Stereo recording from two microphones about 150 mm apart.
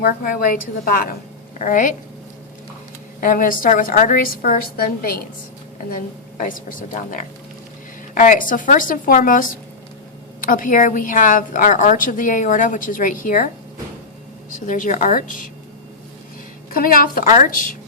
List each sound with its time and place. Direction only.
0.0 s a woman's voice: 75° left (ahead or behind)
3.2 s a woman's voice: 65° left (ahead or behind); by 5.3 s 80° left
5.9 s a woman's voice: 65° left (ahead or behind)
14.6 s a woman's voice: 60° left (ahead or behind)
16.7 s a woman's voice: 75° left (ahead or behind); by 17.5 s 55° left (ahead or behind)